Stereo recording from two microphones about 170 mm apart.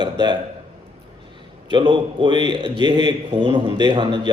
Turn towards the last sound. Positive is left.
turn(degrees=-25)  # may be behind; listen again after turning